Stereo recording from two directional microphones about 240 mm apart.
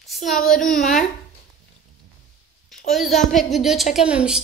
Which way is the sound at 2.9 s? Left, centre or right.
Centre.